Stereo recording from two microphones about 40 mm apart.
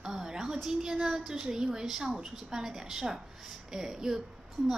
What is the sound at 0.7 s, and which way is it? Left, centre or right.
A woman's voice, centre.